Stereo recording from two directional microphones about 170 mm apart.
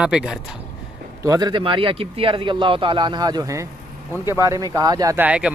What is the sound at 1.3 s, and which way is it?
Speech, 25° right (ahead or behind).